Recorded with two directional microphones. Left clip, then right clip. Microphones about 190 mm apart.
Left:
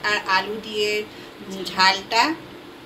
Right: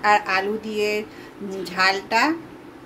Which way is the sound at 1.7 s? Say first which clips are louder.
Left 2 dB; 55° right (ahead or behind).